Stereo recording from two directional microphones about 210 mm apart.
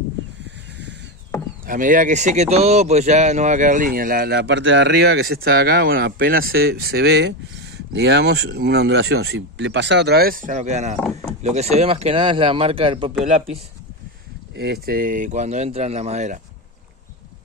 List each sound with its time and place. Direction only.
1.7 s speech: 40° right (ahead or behind)
14.5 s speech: 50° right (ahead or behind); by 16.3 s 35° right (ahead or behind)